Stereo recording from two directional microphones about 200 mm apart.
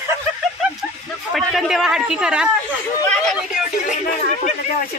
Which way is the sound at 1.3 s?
Centre (ahead or behind).